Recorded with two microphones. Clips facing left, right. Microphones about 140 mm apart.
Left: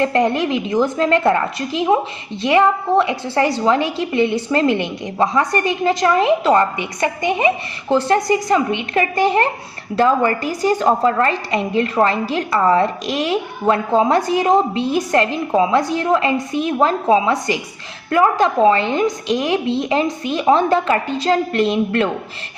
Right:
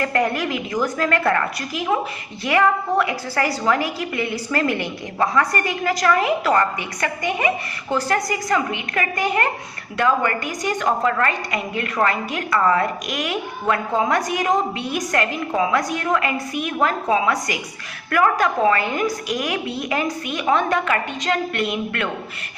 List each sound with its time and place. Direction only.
0.0 s a woman's voice: 25° left (ahead or behind)